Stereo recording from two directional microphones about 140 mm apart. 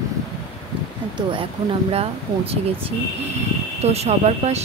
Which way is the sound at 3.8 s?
50° right (ahead or behind).